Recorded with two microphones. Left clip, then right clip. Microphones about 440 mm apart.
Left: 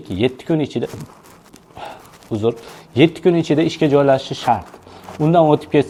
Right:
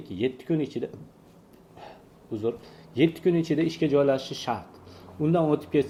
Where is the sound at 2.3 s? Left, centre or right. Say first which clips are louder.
Left 10 dB; left.